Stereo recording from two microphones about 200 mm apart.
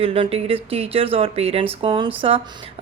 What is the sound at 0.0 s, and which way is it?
Speech, 30° right (ahead or behind).